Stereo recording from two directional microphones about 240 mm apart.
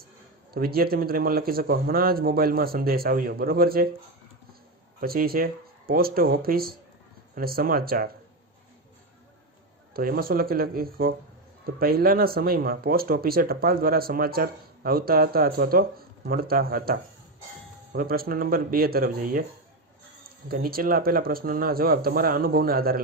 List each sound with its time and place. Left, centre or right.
0.5 s speech: right
4.9 s speech: right
9.9 s speech: right
20.5 s speech: right